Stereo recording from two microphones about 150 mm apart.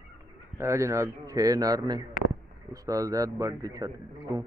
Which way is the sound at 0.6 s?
20° right (ahead or behind).